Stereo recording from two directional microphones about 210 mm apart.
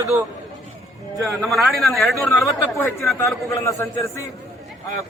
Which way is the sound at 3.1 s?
15° left (ahead or behind).